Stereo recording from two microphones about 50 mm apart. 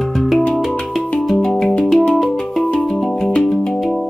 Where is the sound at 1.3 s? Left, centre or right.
Centre.